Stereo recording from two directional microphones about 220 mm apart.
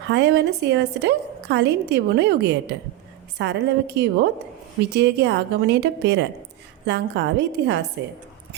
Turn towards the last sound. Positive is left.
turn(degrees=-50)  # may be behind; listen again after turning